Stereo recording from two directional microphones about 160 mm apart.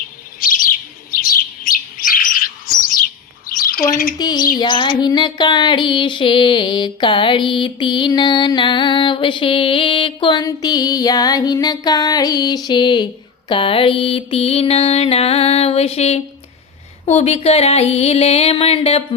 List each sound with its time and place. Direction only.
0.3 s bird: 60° left (ahead or behind)
4.2 s a sound: 25° left (ahead or behind)
13.5 s mantra: 35° left (ahead or behind)